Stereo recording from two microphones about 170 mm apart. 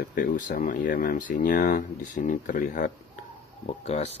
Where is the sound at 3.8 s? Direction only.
40° left (ahead or behind).